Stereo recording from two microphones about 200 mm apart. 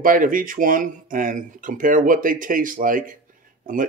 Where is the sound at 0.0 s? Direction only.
45° right (ahead or behind).